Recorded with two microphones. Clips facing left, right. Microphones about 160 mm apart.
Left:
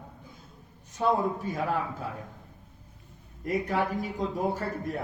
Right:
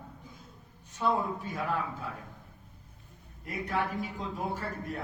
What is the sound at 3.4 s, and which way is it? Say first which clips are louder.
A woman's voice: left 5 dB; 40° left (ahead or behind).